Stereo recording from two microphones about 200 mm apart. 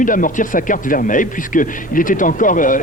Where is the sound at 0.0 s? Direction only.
40° left (ahead or behind).